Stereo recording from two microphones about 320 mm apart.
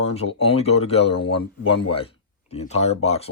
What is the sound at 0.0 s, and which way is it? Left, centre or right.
Speech, centre.